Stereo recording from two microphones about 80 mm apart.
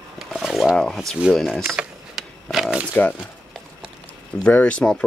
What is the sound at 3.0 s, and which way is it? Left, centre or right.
Speech, left.